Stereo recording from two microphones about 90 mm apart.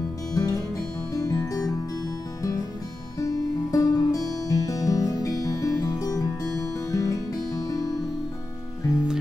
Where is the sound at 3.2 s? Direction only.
40° left (ahead or behind).